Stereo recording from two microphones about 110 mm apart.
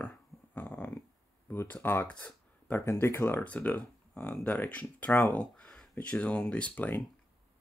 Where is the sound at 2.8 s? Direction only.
25° left (ahead or behind).